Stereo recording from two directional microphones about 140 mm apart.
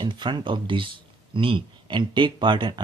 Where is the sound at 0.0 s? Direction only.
30° right (ahead or behind).